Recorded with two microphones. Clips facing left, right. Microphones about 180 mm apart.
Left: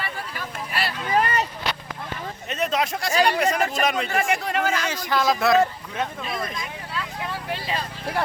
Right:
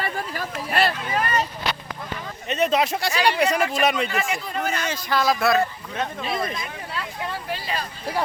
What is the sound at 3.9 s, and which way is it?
Speech, 45° left (ahead or behind).